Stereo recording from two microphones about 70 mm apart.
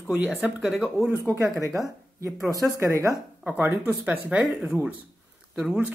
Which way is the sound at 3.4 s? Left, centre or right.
Right.